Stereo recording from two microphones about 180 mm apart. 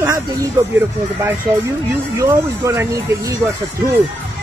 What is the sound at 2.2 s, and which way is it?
Speech, 15° right (ahead or behind).